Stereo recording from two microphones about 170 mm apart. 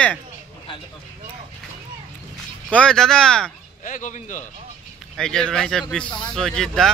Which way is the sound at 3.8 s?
50° left (ahead or behind).